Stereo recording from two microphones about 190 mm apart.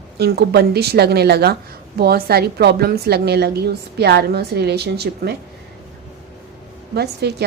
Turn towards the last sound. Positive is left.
turn(degrees=-60)  # may be behind; listen again after turning